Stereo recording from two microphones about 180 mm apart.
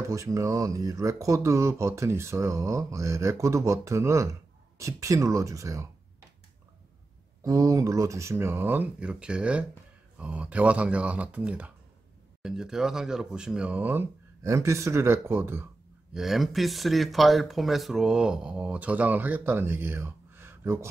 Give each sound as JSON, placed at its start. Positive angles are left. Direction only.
{"t": 0.1, "sound": "speech", "side_deg": -15}
{"t": 7.4, "sound": "speech", "side_deg": -20}
{"t": 16.1, "sound": "speech", "side_deg": 0}